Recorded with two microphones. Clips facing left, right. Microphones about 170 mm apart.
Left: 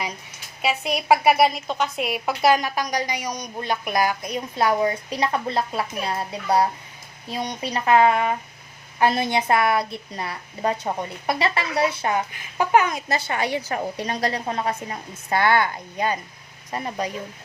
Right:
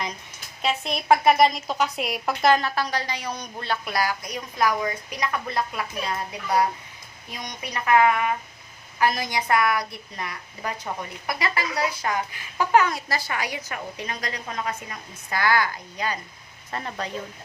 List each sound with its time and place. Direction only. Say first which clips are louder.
0.6 s a woman's voice: left 2 dB; 10° left (ahead or behind)
16.7 s a woman's voice: left 4 dB; 15° left (ahead or behind)